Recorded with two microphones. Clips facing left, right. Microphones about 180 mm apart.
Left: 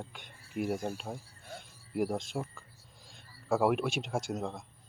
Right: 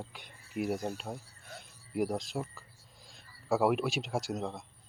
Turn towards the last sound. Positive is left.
turn(degrees=0)  # may be behind; listen again after turning